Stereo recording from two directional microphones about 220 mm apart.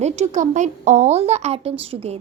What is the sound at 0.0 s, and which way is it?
A woman's voice, 30° right (ahead or behind).